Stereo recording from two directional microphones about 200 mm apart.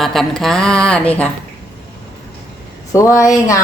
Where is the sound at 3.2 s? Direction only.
15° left (ahead or behind).